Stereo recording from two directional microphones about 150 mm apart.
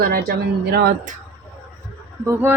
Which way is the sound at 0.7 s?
90° right.